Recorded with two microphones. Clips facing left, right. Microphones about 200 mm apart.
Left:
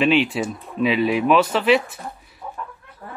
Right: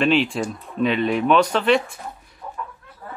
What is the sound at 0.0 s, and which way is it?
Speech, centre (ahead or behind).